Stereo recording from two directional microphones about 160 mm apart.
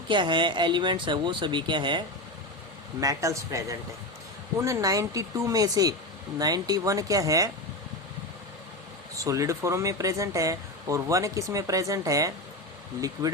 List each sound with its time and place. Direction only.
0.1 s speech: 30° right (ahead or behind)
9.1 s speech: 20° right (ahead or behind)